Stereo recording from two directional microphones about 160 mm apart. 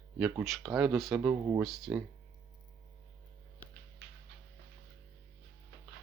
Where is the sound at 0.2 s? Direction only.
10° right (ahead or behind).